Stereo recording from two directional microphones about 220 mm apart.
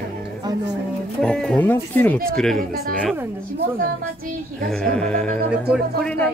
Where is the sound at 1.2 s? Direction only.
5° left (ahead or behind).